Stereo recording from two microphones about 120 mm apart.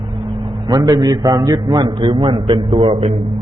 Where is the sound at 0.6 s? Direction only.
30° right (ahead or behind).